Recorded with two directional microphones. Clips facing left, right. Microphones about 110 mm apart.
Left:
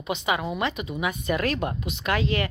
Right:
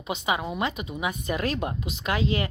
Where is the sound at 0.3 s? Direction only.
25° right (ahead or behind).